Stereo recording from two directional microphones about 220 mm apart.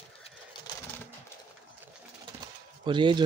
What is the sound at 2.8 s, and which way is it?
Speech, 20° right (ahead or behind).